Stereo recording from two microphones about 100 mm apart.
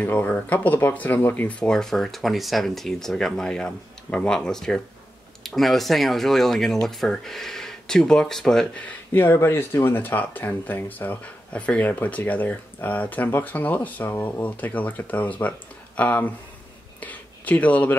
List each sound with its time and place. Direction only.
0.0 s speech: 15° left (ahead or behind)